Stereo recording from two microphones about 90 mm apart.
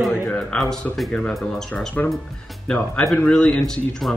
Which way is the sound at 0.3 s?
10° left (ahead or behind).